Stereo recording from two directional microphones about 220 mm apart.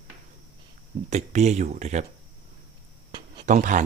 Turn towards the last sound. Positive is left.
turn(degrees=-35)  # may be behind; listen again after turning